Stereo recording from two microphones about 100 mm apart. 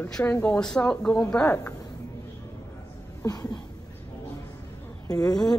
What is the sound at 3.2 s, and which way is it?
Speech, 40° left (ahead or behind).